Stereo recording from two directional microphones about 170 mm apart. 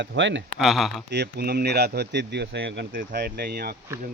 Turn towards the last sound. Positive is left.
turn(degrees=-70)  # may be behind; listen again after turning